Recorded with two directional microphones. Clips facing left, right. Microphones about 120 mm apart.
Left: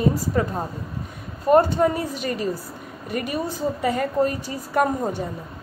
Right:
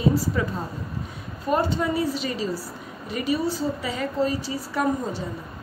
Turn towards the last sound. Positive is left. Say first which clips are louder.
# left 3 dB
turn(degrees=55)  # may be behind; listen again after turning